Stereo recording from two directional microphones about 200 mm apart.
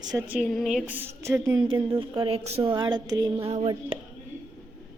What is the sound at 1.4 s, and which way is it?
A woman's voice, 20° right (ahead or behind).